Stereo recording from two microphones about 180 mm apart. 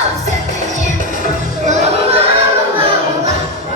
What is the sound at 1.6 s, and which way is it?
Music, 40° right (ahead or behind).